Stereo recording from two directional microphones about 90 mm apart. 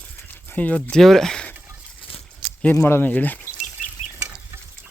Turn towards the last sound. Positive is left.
turn(degrees=20)  # may be behind; listen again after turning